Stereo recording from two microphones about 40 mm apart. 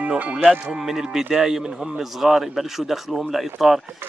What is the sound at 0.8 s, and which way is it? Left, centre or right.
A man's voice, centre.